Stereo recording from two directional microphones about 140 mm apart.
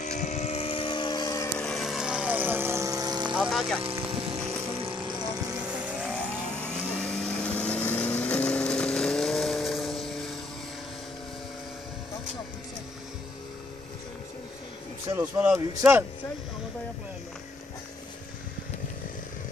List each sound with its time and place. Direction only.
0.0 s vehicle: 55° left (ahead or behind); by 1.5 s 25° left (ahead or behind)
1.6 s vehicle: centre (ahead or behind); by 3.3 s 30° right (ahead or behind)
3.3 s speech: centre (ahead or behind)
4.3 s vehicle: 20° right (ahead or behind)
4.8 s vehicle: 35° right (ahead or behind)
5.9 s vehicle: 5° right (ahead or behind)
6.5 s vehicle: 5° left (ahead or behind)
15.1 s a man's voice: 10° right (ahead or behind)